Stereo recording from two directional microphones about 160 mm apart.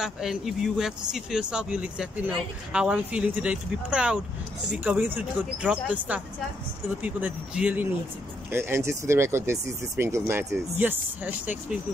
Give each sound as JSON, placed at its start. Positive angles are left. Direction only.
{"t": 0.0, "sound": "speech", "side_deg": -5}